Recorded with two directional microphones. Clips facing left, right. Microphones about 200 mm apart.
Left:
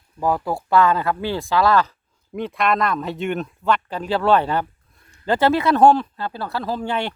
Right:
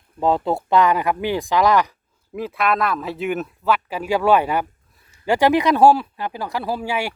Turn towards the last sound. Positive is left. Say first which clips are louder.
# even
turn(degrees=-10)  # may be behind; listen again after turning